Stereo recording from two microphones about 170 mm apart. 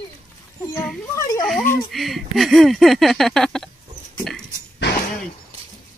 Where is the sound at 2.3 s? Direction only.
Centre (ahead or behind).